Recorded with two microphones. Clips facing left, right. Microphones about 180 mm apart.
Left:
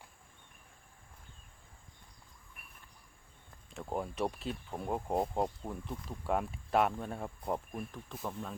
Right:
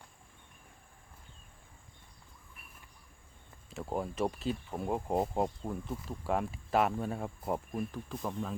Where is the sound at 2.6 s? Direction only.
55° left (ahead or behind).